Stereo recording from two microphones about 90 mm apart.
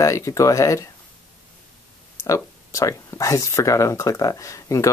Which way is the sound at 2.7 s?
35° left (ahead or behind).